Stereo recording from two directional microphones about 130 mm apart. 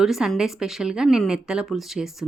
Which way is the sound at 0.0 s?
Centre (ahead or behind).